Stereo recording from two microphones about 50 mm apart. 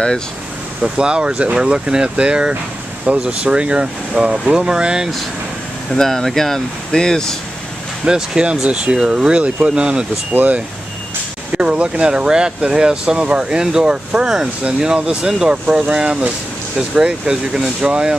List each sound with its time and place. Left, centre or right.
0.8 s speech: centre
5.9 s speech: centre
8.0 s speech: centre
10.3 s speech: right
11.5 s speech: right